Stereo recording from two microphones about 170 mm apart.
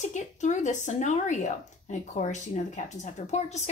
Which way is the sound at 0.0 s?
45° left (ahead or behind).